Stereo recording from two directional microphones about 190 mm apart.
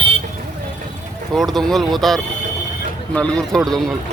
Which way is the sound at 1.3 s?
Centre (ahead or behind).